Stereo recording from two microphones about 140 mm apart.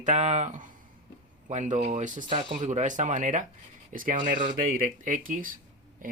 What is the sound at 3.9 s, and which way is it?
Speech, 75° right (ahead or behind).